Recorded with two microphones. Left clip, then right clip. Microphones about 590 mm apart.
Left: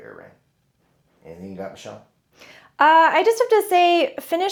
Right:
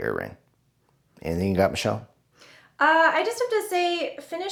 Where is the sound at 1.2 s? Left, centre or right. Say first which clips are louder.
Right 12 dB; right.